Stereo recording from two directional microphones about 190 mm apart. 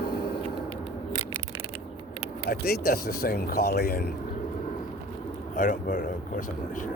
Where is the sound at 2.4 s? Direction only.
55° left (ahead or behind).